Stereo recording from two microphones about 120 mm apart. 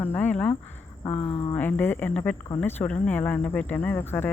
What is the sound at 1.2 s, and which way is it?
Speech, 50° left (ahead or behind).